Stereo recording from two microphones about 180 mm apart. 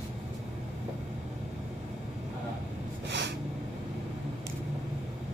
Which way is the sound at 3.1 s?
75° right (ahead or behind).